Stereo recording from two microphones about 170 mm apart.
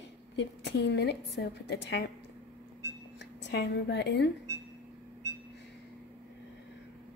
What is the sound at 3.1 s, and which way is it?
A woman's voice, 85° left.